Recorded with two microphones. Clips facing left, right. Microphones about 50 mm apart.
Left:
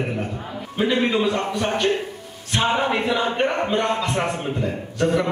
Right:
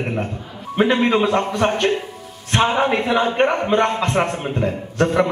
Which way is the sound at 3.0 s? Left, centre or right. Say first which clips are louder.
Right 4 dB; right.